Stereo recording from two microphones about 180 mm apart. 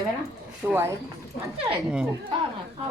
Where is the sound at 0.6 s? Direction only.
15° right (ahead or behind).